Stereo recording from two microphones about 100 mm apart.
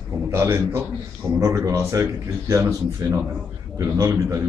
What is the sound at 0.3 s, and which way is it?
A man's voice, 25° right (ahead or behind).